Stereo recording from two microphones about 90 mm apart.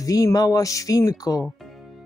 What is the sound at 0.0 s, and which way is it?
Speech, 40° left (ahead or behind).